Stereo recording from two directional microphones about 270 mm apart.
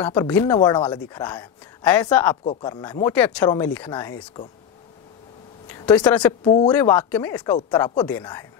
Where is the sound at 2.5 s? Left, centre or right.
Centre.